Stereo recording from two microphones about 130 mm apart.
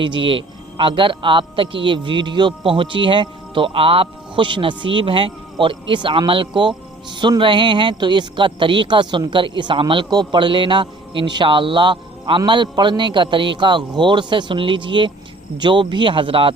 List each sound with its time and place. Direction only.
0.0 s a man's voice: 40° right (ahead or behind)